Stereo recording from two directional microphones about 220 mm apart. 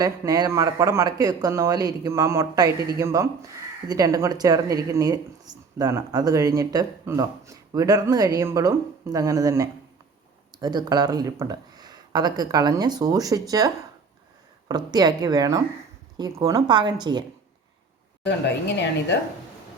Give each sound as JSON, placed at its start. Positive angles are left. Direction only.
{"t": 0.0, "sound": "a woman's voice", "side_deg": -15}